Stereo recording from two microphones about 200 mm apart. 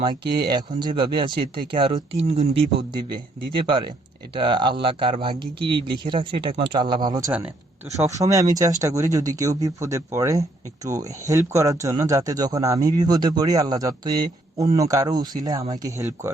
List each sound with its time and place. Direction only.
0.3 s speech: 20° right (ahead or behind)